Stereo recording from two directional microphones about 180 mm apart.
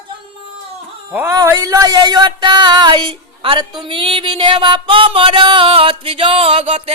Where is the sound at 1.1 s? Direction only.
10° right (ahead or behind).